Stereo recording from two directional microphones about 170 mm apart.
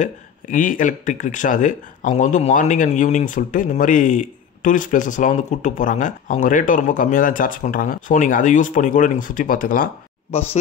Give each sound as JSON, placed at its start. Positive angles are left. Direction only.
{"t": 0.0, "sound": "speech", "side_deg": 50}
{"t": 10.3, "sound": "speech", "side_deg": 40}